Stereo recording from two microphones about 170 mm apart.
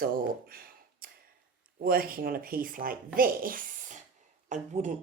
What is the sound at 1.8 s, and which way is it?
Speech, 60° right (ahead or behind).